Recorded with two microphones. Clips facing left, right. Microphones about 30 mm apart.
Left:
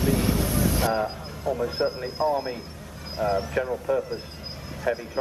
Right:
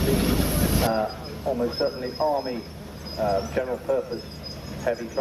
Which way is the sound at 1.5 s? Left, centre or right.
Right.